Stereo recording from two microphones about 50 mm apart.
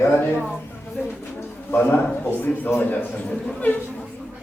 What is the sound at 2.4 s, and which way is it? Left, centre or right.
Speech, left.